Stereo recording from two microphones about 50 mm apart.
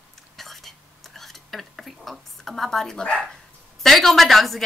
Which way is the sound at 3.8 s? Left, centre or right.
Centre.